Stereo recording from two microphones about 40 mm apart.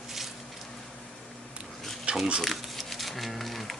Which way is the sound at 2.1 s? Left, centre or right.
Right.